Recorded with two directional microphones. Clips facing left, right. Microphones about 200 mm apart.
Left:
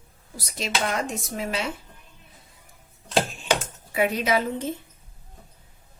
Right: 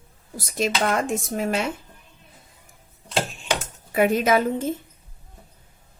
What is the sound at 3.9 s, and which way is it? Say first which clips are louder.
Speech: right 4 dB; 50° right (ahead or behind).